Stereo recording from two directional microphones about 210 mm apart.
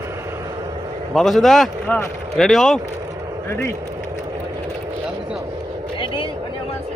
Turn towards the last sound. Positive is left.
turn(degrees=25)  # may be behind; listen again after turning